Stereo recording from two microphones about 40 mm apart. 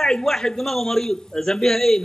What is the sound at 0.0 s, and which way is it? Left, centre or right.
A man's voice, centre.